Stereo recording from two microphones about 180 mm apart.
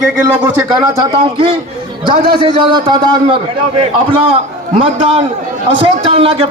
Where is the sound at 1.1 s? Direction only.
25° right (ahead or behind).